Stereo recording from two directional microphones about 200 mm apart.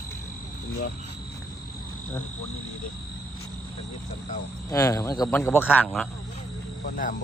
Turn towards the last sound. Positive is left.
turn(degrees=45)  # may be behind; listen again after turning